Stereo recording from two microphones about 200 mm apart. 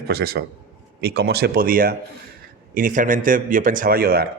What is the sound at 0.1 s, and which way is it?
A man's voice, 50° right (ahead or behind).